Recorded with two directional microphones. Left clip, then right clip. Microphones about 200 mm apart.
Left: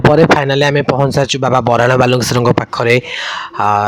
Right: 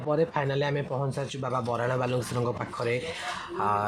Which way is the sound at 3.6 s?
45° left (ahead or behind).